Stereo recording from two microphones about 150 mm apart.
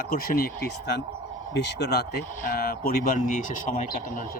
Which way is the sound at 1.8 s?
90° left.